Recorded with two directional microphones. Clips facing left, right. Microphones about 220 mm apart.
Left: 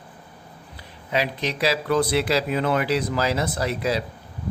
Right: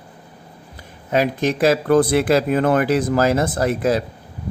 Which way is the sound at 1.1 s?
45° right (ahead or behind).